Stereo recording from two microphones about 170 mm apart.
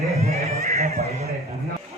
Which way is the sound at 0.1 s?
40° right (ahead or behind).